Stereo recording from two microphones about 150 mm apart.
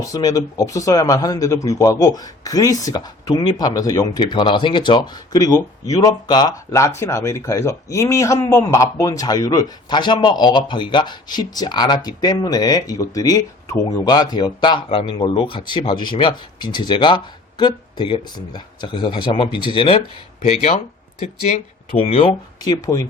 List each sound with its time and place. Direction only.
0.0 s speech: 25° left (ahead or behind)
20.4 s speech: 45° left (ahead or behind); by 23.0 s 20° left (ahead or behind)